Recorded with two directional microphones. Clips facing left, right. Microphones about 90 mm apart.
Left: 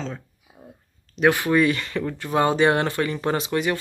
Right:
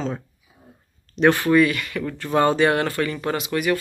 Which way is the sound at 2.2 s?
15° left (ahead or behind).